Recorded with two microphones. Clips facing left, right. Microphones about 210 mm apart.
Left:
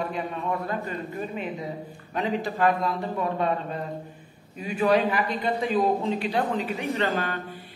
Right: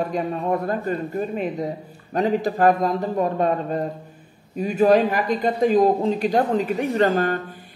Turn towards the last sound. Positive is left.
turn(degrees=-45)  # may be behind; listen again after turning